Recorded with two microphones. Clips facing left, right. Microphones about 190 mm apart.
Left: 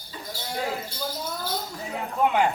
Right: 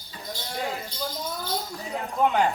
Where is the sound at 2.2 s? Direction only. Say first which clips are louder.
Even; centre (ahead or behind).